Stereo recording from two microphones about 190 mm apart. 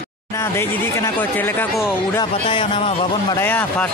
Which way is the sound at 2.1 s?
25° left (ahead or behind).